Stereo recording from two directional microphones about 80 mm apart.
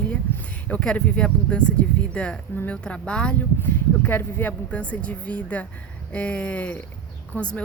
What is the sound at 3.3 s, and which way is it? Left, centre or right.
Speech, left.